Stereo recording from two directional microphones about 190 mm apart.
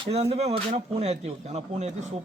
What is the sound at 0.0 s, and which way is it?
Speech, 30° right (ahead or behind).